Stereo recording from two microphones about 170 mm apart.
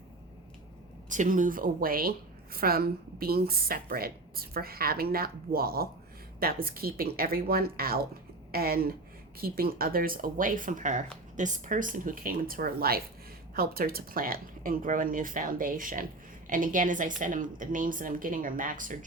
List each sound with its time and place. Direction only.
1.1 s a woman's voice: 50° right (ahead or behind)